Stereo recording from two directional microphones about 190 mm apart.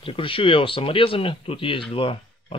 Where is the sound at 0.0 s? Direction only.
30° left (ahead or behind).